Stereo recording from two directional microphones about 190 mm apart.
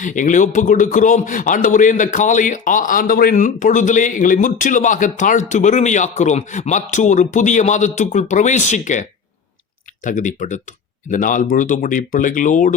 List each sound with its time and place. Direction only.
0.0 s speech: 40° left (ahead or behind)